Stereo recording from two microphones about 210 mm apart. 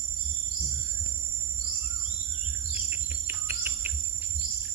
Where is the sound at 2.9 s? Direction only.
10° right (ahead or behind).